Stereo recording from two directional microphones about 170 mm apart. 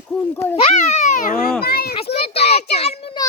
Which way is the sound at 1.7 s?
65° left (ahead or behind).